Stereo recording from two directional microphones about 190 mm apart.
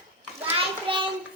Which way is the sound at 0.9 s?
25° right (ahead or behind).